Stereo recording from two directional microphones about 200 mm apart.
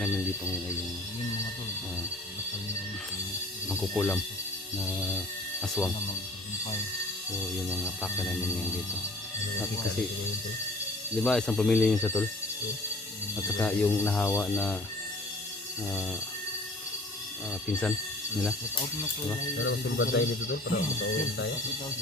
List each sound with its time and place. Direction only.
3.7 s speech: centre (ahead or behind)
5.1 s a sound: centre (ahead or behind)
7.5 s speech: centre (ahead or behind)
11.2 s speech: 5° left (ahead or behind)
13.3 s speech: 5° left (ahead or behind)
19.5 s speech: 70° left (ahead or behind)